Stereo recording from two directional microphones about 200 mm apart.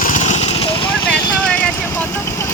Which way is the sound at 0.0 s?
40° left (ahead or behind).